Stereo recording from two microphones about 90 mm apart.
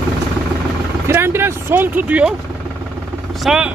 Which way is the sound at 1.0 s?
25° right (ahead or behind).